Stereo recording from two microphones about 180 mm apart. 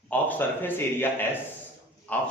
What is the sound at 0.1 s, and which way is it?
Speech, 10° left (ahead or behind).